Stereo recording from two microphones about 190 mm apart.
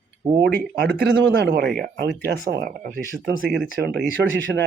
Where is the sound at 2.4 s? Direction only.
50° right (ahead or behind).